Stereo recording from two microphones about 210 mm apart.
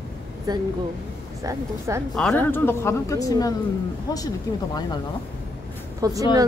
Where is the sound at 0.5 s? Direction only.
20° right (ahead or behind).